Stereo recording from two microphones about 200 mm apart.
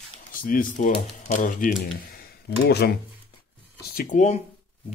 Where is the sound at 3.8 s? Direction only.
45° left (ahead or behind).